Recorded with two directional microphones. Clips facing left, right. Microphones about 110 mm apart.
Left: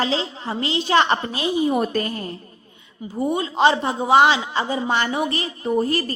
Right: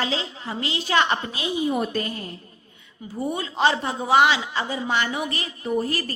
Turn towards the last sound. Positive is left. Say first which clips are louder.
# left 4 dB
turn(degrees=30)  # may be behind; listen again after turning